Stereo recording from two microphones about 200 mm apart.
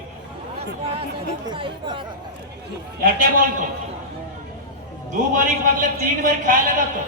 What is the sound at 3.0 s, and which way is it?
Speech, 45° right (ahead or behind).